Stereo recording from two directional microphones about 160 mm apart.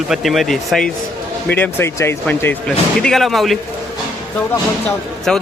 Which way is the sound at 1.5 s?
15° left (ahead or behind).